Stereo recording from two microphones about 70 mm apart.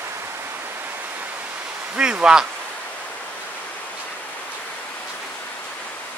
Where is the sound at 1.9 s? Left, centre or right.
Centre.